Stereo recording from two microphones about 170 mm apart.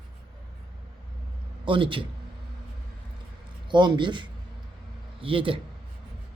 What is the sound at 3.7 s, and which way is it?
A man's voice, 30° right (ahead or behind).